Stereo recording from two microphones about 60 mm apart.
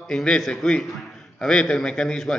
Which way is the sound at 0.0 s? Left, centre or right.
Centre.